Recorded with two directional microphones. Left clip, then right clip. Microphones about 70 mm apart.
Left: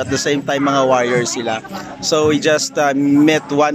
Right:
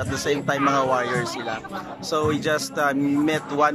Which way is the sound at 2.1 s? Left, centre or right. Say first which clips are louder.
Left 8 dB; centre.